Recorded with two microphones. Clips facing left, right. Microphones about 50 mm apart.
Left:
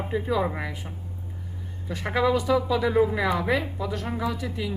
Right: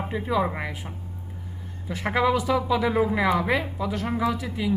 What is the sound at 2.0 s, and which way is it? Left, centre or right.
Speech, centre.